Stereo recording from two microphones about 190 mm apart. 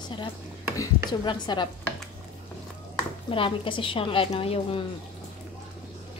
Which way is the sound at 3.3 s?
30° left (ahead or behind).